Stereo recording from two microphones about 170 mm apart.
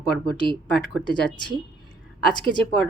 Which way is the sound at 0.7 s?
Centre (ahead or behind).